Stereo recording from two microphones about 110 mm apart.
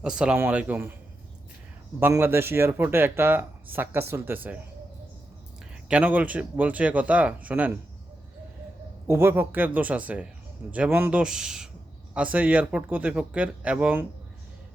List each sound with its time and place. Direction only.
0.0 s speech: 5° right (ahead or behind)
2.0 s speech: 20° right (ahead or behind)
5.9 s speech: 15° right (ahead or behind)
9.0 s speech: 25° right (ahead or behind)